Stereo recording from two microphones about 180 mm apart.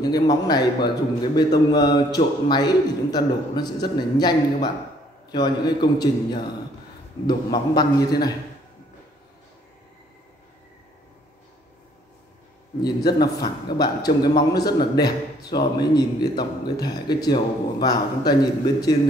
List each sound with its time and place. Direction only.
0.0 s a man's voice: 25° left (ahead or behind)
12.8 s a man's voice: 20° left (ahead or behind)